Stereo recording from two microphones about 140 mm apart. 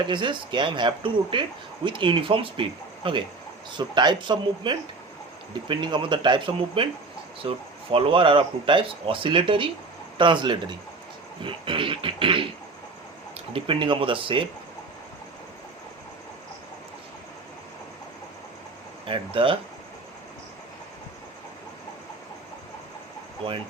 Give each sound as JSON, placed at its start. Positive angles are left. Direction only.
{"t": 0.0, "sound": "speech", "side_deg": -35}
{"t": 13.5, "sound": "speech", "side_deg": -40}
{"t": 19.0, "sound": "speech", "side_deg": -40}